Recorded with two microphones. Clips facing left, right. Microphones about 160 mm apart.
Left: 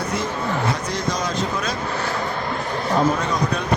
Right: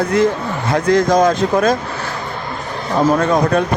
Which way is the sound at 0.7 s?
50° right (ahead or behind).